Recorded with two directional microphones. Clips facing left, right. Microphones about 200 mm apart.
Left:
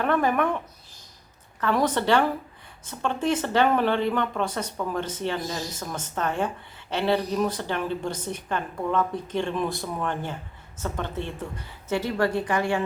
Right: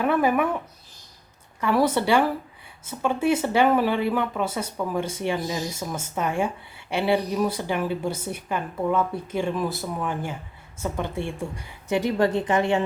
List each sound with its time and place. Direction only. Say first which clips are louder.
0.0 s speech: right 2 dB; 10° right (ahead or behind)
1.6 s speech: right 2 dB; 10° right (ahead or behind)